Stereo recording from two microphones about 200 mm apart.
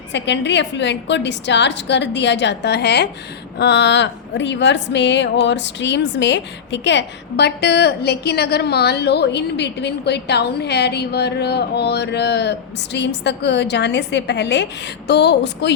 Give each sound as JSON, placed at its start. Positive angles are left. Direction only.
{"t": 0.1, "sound": "a woman's voice", "side_deg": 60}